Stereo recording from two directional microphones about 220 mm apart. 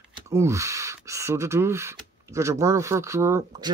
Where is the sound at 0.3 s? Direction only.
15° right (ahead or behind).